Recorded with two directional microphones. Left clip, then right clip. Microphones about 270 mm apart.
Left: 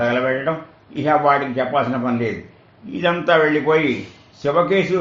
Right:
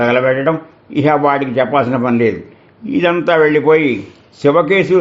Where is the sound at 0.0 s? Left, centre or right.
Right.